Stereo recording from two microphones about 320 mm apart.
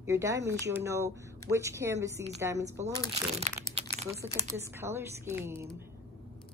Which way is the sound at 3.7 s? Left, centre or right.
Centre.